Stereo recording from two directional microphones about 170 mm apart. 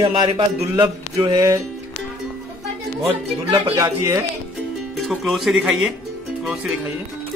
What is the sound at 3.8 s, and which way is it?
Music, 20° right (ahead or behind).